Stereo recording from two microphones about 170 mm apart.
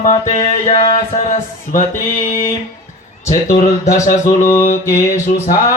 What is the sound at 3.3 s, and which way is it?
Speech, 50° left (ahead or behind).